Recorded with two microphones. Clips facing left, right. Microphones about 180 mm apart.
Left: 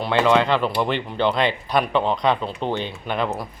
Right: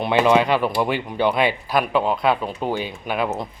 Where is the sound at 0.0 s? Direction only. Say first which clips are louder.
Right 1 dB; 15° right (ahead or behind).